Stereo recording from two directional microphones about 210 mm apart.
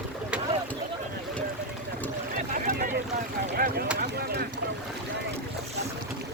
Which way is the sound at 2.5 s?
45° right (ahead or behind).